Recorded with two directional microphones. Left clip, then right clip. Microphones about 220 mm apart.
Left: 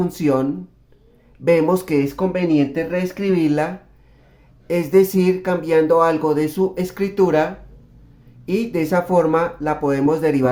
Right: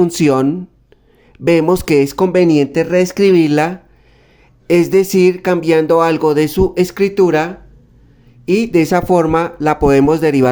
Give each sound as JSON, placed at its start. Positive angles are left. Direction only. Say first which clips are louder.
{"t": 0.0, "sound": "speech", "louder": "right 7 dB", "side_deg": -45}
{"t": 1.5, "sound": "speech", "louder": "right 4 dB", "side_deg": -45}